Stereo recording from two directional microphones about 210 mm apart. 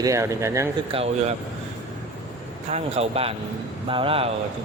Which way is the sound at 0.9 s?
30° right (ahead or behind).